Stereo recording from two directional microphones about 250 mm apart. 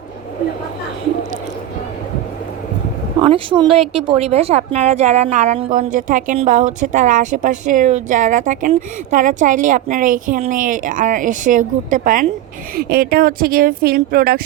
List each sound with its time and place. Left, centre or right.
3.2 s a woman's voice: centre; by 14.4 s right